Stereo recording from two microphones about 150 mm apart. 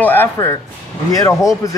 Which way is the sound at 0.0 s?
15° left (ahead or behind).